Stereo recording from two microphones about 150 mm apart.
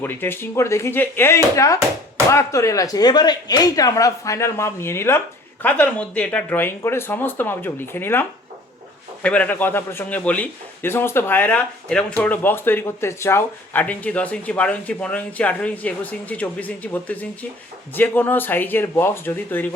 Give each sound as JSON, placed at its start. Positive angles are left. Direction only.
{"t": 0.0, "sound": "a man's voice", "side_deg": 15}